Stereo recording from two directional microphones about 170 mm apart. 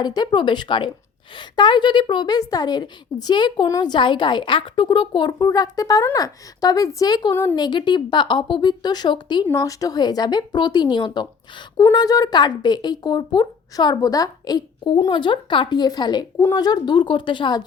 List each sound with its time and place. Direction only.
0.0 s a woman's voice: 25° left (ahead or behind)